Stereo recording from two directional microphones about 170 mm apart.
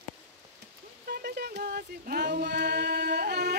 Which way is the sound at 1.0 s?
65° right (ahead or behind).